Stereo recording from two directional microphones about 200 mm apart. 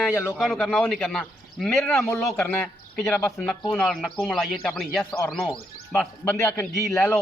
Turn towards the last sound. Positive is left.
turn(degrees=10)  # may be behind; listen again after turning